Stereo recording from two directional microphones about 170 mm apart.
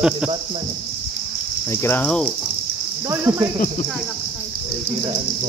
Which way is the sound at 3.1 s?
15° right (ahead or behind).